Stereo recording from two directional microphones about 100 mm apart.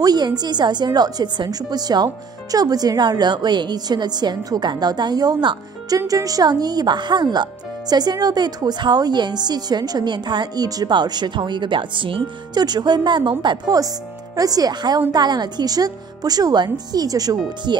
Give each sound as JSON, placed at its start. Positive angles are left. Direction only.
{"t": 0.0, "sound": "a woman's voice", "side_deg": -40}
{"t": 13.7, "sound": "speech", "side_deg": -35}